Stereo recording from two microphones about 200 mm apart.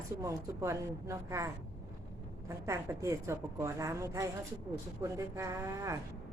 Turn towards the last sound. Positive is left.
turn(degrees=-15)  # may be behind; listen again after turning